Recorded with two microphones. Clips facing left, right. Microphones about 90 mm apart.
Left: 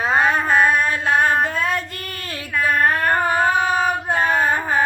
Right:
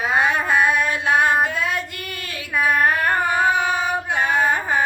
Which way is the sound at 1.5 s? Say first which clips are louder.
Left 2 dB; 40° left (ahead or behind).